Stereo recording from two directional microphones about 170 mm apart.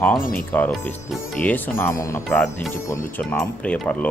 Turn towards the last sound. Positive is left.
turn(degrees=10)  # may be behind; listen again after turning